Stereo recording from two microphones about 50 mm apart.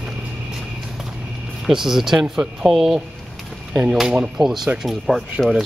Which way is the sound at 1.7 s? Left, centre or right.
Centre.